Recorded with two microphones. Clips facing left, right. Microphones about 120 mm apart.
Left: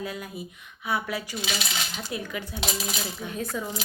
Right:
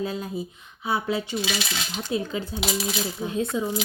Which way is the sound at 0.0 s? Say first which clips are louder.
Right 5 dB; 30° right (ahead or behind).